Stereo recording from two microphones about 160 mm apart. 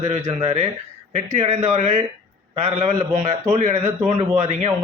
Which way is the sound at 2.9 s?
20° right (ahead or behind).